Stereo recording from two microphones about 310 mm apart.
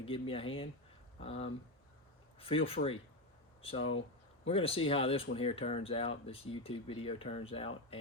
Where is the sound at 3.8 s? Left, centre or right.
Left.